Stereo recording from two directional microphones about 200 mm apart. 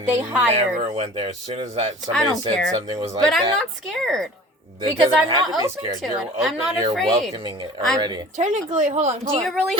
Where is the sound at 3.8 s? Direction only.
Centre (ahead or behind).